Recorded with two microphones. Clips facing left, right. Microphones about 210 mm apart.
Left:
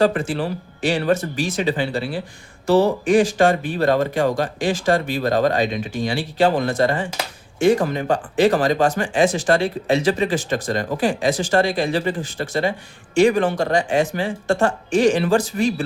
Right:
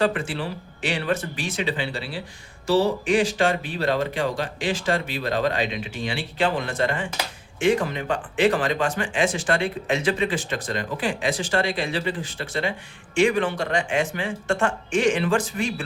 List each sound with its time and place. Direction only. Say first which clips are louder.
0.0 s speech: left 5 dB; 40° left (ahead or behind)